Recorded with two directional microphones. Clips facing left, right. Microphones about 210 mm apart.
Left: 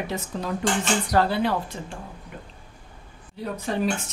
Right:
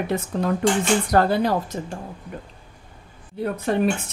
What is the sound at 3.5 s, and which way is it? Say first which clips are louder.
Speech: right 5 dB; 55° right (ahead or behind).